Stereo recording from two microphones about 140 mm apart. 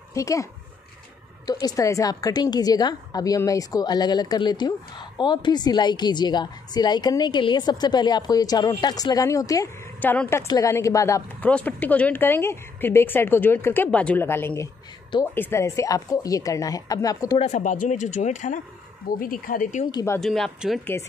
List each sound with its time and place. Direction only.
0.1 s a woman's voice: 20° left (ahead or behind)
10.0 s a woman's voice: 15° left (ahead or behind)
11.4 s a woman's voice: 10° left (ahead or behind)
17.4 s speech: 60° left (ahead or behind)
19.0 s speech: 85° left; by 19.9 s 65° left (ahead or behind)
19.9 s a woman's voice: 25° left (ahead or behind)
20.2 s speech: centre (ahead or behind)
20.8 s a woman's voice: 20° left (ahead or behind)